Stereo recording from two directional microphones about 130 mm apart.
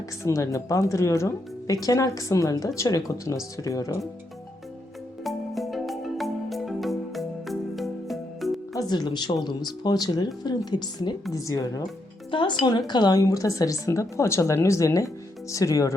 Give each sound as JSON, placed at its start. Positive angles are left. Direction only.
{"t": 0.2, "sound": "speech", "side_deg": 25}
{"t": 5.2, "sound": "music", "side_deg": 0}
{"t": 8.7, "sound": "speech", "side_deg": 30}